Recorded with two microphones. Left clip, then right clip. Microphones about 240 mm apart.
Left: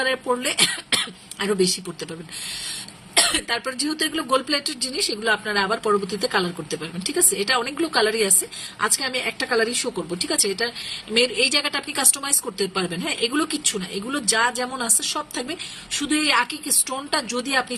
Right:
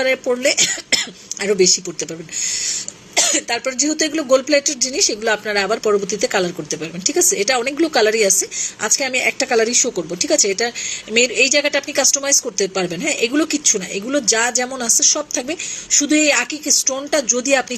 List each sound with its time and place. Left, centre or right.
0.0 s speech: centre